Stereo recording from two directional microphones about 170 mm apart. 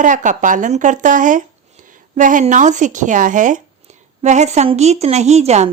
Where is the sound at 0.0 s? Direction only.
50° right (ahead or behind).